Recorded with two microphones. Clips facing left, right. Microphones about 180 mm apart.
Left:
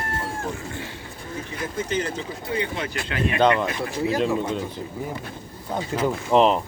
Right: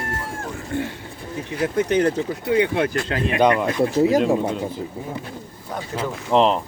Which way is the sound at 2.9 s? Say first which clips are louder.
Right 6 dB; 40° right (ahead or behind).